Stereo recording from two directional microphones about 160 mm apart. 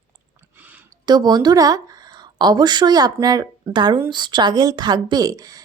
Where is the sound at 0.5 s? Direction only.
10° right (ahead or behind).